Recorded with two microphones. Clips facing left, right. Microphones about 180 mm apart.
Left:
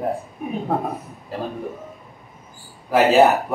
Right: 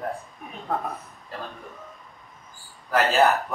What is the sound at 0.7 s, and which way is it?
Speech, 25° left (ahead or behind).